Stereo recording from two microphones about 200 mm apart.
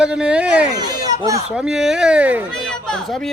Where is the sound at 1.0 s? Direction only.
20° right (ahead or behind).